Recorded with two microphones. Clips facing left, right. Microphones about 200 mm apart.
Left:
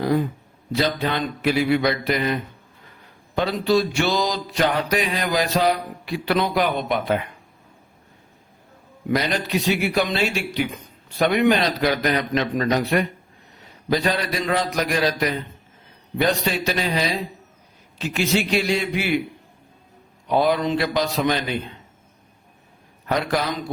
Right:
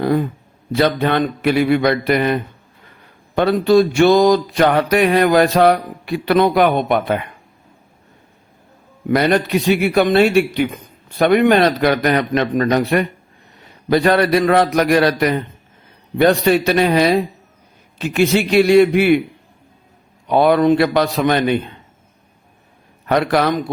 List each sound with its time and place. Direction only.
0.0 s speech: 55° right (ahead or behind)
0.8 s mantra: 60° right (ahead or behind)
9.0 s mantra: 55° right (ahead or behind)
20.3 s mantra: 60° right (ahead or behind)
23.0 s a man's voice: 65° right (ahead or behind)